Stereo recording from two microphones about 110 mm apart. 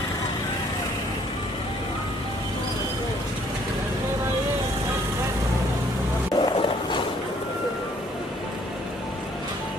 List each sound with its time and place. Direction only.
6.3 s music: 45° left (ahead or behind)